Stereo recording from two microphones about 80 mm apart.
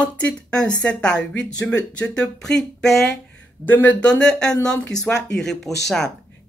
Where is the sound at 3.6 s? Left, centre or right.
Left; by 6.1 s centre.